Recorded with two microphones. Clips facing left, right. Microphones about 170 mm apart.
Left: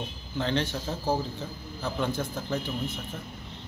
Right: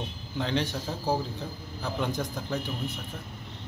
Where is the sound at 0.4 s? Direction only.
10° right (ahead or behind).